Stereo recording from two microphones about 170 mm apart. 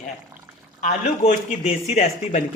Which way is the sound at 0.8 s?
45° left (ahead or behind).